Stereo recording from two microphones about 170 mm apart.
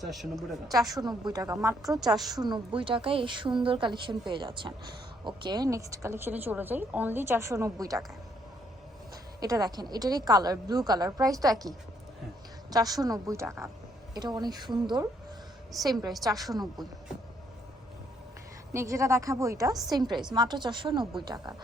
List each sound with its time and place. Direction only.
0.0 s a woman's voice: centre (ahead or behind)
0.9 s a woman's voice: 25° right (ahead or behind)
9.4 s a woman's voice: 20° right (ahead or behind)
12.7 s a woman's voice: 20° right (ahead or behind)
15.7 s a woman's voice: centre (ahead or behind)
16.5 s a woman's voice: 25° right (ahead or behind)
18.7 s a woman's voice: 15° right (ahead or behind)